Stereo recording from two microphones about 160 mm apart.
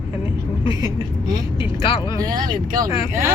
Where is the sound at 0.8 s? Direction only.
25° right (ahead or behind).